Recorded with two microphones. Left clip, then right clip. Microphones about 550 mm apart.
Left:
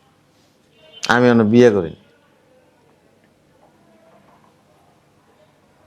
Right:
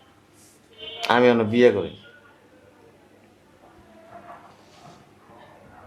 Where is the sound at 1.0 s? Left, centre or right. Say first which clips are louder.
Left 3 dB; left.